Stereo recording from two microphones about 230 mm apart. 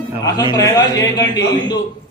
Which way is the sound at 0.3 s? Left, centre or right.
Centre.